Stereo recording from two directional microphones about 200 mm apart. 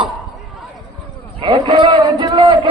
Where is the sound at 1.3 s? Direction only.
25° right (ahead or behind).